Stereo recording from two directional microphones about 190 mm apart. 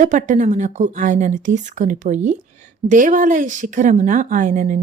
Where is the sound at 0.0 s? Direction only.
40° right (ahead or behind).